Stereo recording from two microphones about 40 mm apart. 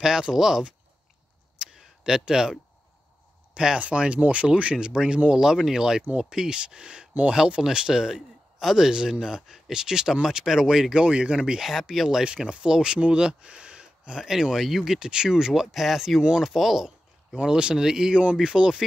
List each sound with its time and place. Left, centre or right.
0.0 s speech: centre
1.6 s a sound: centre
2.2 s speech: centre
3.5 s speech: right
11.0 s speech: right; by 12.3 s centre
12.3 s speech: right
14.2 s speech: centre
16.2 s speech: centre
17.4 s speech: right